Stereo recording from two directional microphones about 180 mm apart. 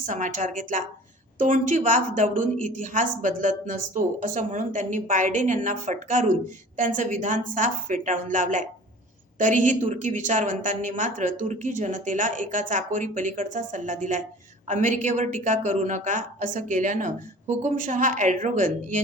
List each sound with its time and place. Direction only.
0.0 s a woman's voice: 45° right (ahead or behind)